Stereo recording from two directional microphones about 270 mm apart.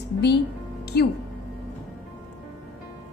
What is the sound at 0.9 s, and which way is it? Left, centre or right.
Speech, left.